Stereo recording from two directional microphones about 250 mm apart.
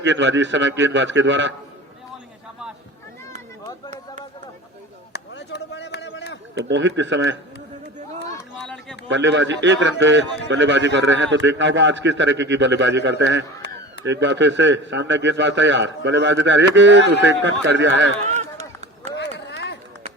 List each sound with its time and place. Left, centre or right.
0.0 s a man's voice: right
3.7 s a sound: centre
5.1 s chop: left
6.5 s a man's voice: right
8.5 s a sound: centre
9.0 s a man's voice: right
18.3 s run: right
19.1 s run: left